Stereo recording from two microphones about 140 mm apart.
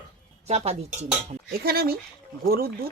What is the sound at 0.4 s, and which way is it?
Speech, 50° right (ahead or behind).